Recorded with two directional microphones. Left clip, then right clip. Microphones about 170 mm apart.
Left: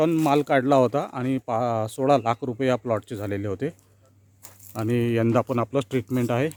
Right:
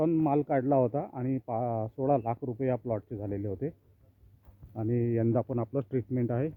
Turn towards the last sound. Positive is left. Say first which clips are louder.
# left 7 dB
turn(degrees=20)  # may be behind; listen again after turning